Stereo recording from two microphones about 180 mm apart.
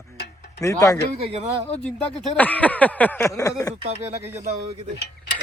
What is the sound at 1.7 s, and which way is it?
Speech, 5° left (ahead or behind).